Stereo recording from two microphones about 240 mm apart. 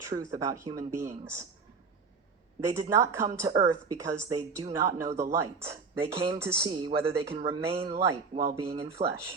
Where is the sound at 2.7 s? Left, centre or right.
Centre.